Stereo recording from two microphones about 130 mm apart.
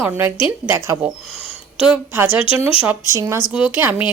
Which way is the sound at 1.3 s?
50° left (ahead or behind).